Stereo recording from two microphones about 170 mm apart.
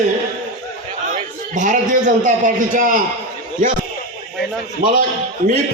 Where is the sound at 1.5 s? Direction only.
50° right (ahead or behind).